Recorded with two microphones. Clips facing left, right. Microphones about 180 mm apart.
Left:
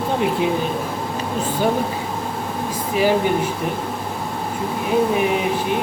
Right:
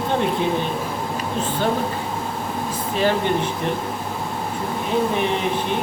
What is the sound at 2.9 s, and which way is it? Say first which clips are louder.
Speech: left 3 dB; 10° left (ahead or behind).